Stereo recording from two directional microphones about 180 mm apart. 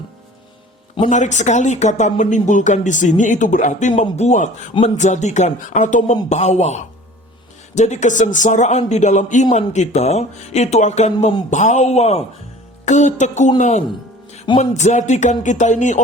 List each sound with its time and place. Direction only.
1.1 s speech: 40° left (ahead or behind)